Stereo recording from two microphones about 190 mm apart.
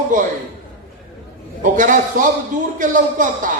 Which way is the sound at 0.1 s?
45° right (ahead or behind).